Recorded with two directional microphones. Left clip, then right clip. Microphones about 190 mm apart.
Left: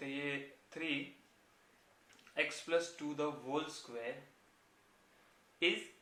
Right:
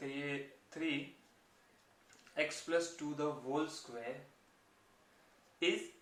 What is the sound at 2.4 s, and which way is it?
Speech, 20° left (ahead or behind).